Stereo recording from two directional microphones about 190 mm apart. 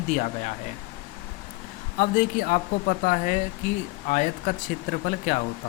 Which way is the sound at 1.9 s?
45° left (ahead or behind).